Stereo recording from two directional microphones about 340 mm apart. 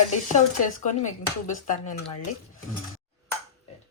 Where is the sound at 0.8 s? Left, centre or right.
Left.